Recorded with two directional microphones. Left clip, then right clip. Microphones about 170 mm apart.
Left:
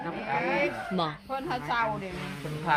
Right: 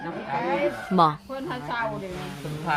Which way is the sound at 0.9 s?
40° right (ahead or behind).